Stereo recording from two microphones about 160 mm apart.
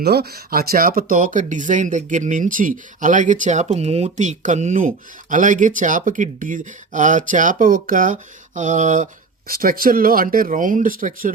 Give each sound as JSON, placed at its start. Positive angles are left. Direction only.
{"t": 0.0, "sound": "speech", "side_deg": -80}
{"t": 9.5, "sound": "speech", "side_deg": -65}